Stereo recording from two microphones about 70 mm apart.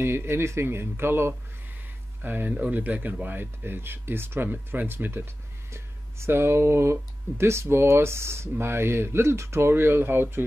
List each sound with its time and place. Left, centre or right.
0.0 s speech: right